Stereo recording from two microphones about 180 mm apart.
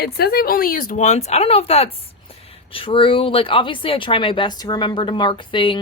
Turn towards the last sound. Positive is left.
turn(degrees=25)  # may be behind; listen again after turning